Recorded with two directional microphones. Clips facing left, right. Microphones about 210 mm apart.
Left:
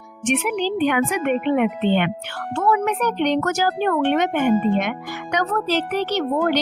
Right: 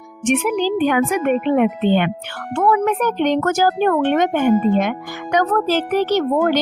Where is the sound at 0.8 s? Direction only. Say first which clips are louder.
Right 3 dB; 45° right (ahead or behind).